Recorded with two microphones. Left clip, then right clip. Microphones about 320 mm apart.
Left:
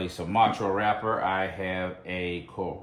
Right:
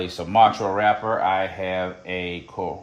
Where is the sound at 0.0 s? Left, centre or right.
Right.